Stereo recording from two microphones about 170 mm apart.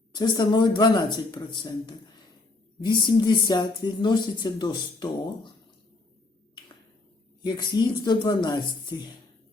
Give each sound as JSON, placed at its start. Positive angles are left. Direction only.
{"t": 0.1, "sound": "speech", "side_deg": 25}
{"t": 7.4, "sound": "speech", "side_deg": 25}